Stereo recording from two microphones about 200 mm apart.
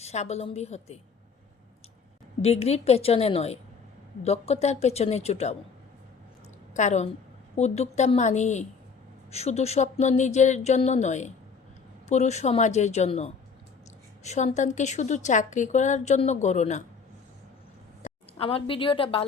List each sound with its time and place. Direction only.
0.0 s a woman's voice: 35° left (ahead or behind)
2.4 s a woman's voice: 30° left (ahead or behind)
6.7 s a woman's voice: 35° left (ahead or behind)
18.0 s a woman's voice: 30° left (ahead or behind)